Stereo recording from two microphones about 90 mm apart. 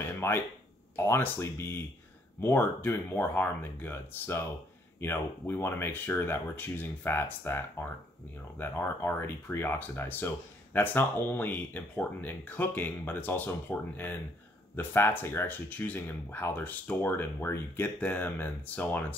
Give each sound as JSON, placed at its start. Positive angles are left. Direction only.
{"t": 0.2, "sound": "speech", "side_deg": 30}